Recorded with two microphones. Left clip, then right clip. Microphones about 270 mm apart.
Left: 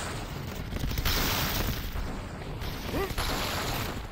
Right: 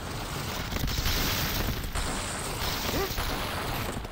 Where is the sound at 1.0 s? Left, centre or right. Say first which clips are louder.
Left 2 dB; centre.